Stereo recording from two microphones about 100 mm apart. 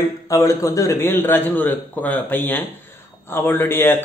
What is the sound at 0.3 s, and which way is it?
A man's voice, 35° left (ahead or behind).